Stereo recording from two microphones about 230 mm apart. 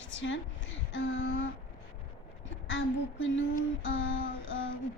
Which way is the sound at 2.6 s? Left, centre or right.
Left.